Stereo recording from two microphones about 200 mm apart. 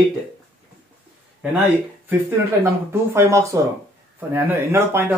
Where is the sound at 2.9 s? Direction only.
15° right (ahead or behind).